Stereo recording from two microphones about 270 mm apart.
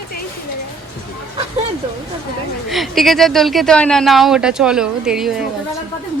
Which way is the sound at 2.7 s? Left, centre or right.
Centre.